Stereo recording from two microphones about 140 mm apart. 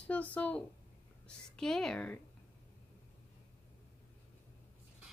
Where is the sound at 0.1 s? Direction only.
10° left (ahead or behind).